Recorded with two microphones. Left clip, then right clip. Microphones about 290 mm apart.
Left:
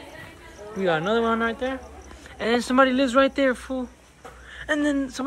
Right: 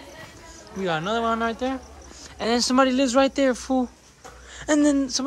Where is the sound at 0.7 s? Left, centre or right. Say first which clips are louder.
Left 3 dB; centre.